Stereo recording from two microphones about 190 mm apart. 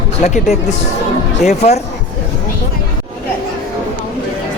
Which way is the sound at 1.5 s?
35° left (ahead or behind).